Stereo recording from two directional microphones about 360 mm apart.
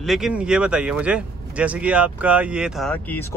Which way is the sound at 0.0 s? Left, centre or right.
Centre.